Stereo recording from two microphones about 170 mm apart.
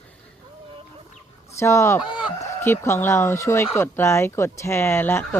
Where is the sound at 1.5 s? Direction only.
15° left (ahead or behind).